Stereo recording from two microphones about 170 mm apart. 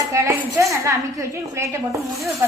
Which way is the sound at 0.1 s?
20° right (ahead or behind).